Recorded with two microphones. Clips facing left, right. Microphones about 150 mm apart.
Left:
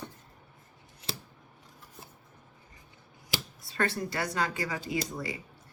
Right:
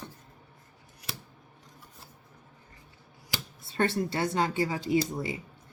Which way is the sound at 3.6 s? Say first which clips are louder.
Right 4 dB; 25° right (ahead or behind).